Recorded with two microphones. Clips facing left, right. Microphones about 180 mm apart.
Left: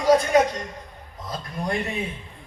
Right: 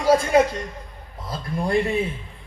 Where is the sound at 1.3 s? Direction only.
30° right (ahead or behind).